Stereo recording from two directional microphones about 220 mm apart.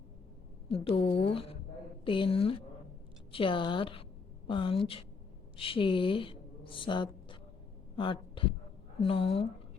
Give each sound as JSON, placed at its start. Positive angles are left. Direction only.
{"t": 0.7, "sound": "a woman's voice", "side_deg": 25}